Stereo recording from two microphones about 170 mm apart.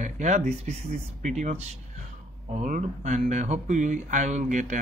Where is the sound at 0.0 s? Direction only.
45° right (ahead or behind).